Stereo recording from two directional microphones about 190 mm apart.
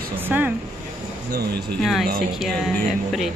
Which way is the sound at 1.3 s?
60° right (ahead or behind).